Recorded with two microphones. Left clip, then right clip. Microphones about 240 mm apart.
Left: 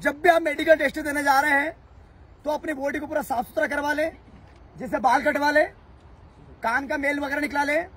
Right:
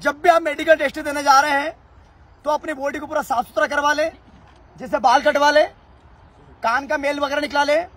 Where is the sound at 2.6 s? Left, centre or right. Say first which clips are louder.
Right 3 dB; centre.